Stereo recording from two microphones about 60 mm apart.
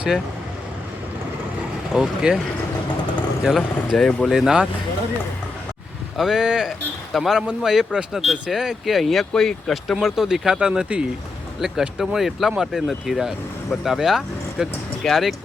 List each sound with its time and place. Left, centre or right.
1.9 s speech: centre
3.4 s speech: centre
3.9 s speech: centre
4.3 s speech: centre
6.1 s speech: centre
6.7 s speech: centre
10.2 s speech: centre